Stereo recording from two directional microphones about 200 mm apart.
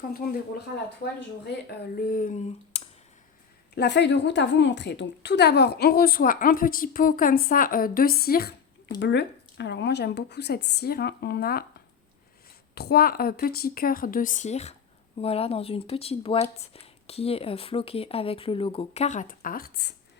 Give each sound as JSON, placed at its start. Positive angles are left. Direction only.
{"t": 1.8, "sound": "a woman's voice", "side_deg": 50}
{"t": 3.8, "sound": "a woman's voice", "side_deg": 60}
{"t": 9.0, "sound": "a woman's voice", "side_deg": 60}
{"t": 12.7, "sound": "a woman's voice", "side_deg": 50}